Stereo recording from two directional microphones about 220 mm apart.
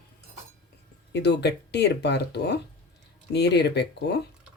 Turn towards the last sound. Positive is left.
turn(degrees=50)  # may be behind; listen again after turning